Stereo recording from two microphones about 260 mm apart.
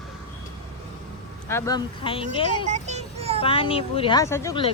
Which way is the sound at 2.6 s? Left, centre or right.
Right.